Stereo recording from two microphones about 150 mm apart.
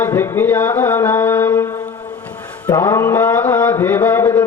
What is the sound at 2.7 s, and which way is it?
Speech, 20° left (ahead or behind).